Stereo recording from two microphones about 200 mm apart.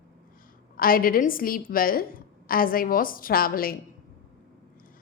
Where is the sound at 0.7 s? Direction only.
45° left (ahead or behind).